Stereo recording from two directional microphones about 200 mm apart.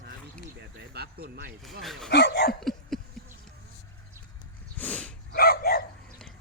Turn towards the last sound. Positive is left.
turn(degrees=50)  # may be behind; listen again after turning